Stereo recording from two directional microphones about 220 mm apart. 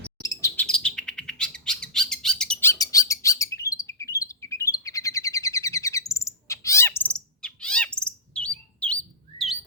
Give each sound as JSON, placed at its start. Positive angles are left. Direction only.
{"t": 0.2, "sound": "bird", "side_deg": 10}